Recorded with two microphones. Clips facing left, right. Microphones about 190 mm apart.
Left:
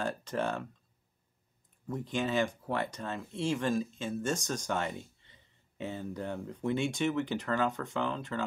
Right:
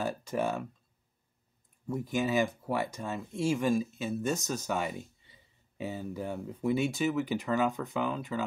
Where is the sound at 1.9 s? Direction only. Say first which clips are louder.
Right 2 dB; 10° right (ahead or behind).